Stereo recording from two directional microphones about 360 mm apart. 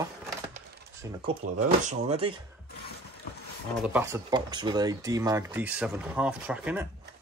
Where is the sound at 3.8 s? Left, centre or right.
Centre.